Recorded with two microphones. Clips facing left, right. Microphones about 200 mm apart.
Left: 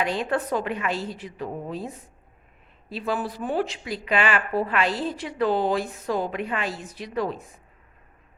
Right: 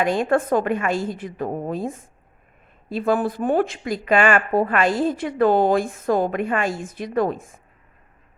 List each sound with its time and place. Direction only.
0.0 s a woman's voice: 50° right (ahead or behind)